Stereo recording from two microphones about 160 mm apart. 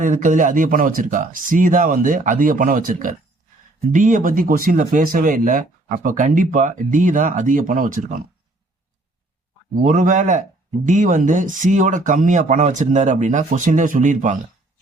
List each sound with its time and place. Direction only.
0.0 s speech: 55° right (ahead or behind)
9.8 s speech: 50° right (ahead or behind)